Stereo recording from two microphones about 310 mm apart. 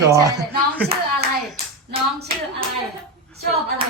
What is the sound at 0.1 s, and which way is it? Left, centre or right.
Speech, centre.